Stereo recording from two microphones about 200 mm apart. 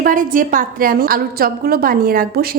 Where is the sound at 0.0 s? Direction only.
40° right (ahead or behind).